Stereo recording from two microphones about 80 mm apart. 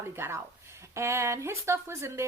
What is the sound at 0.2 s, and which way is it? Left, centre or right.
Speech, right.